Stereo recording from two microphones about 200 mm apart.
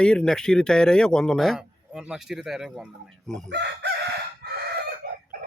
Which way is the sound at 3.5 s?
55° right (ahead or behind).